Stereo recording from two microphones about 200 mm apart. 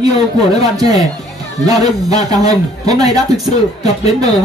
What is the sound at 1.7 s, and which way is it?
A woman's voice, 20° right (ahead or behind).